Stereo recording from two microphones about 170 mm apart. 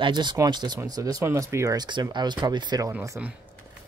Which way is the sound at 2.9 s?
15° right (ahead or behind).